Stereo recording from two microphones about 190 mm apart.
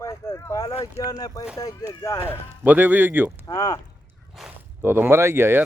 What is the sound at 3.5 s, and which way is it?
Speech, 20° left (ahead or behind).